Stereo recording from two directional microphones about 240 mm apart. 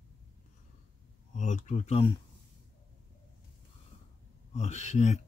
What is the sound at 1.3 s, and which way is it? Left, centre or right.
Speech, left.